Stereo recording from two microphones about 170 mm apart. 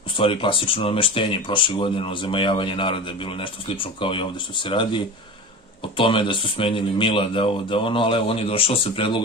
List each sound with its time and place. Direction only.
0.2 s speech: 30° left (ahead or behind)